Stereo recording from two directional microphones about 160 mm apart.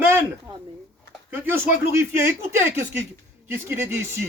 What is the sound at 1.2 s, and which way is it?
Speech, 15° right (ahead or behind).